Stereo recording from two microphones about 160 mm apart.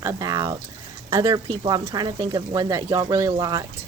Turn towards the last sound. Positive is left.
turn(degrees=-25)  # may be behind; listen again after turning